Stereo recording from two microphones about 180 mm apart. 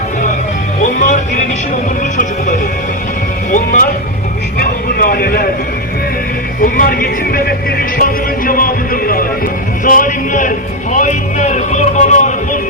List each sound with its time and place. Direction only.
0.8 s music: 45° left (ahead or behind)
3.5 s music: 50° left (ahead or behind)
4.5 s a sound: 50° left (ahead or behind)
6.6 s music: 55° left (ahead or behind)